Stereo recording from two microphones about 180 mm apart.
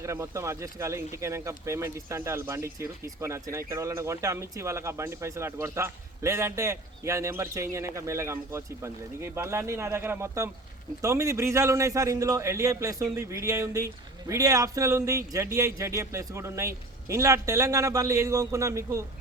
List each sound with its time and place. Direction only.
0.0 s speech: 15° right (ahead or behind)